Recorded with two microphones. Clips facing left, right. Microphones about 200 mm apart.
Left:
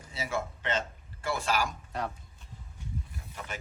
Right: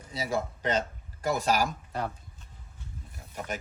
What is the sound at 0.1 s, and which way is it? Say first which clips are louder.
Speech: right 3 dB; 35° right (ahead or behind).